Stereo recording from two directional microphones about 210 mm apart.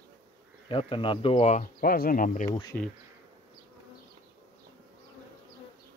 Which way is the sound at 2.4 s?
20° left (ahead or behind).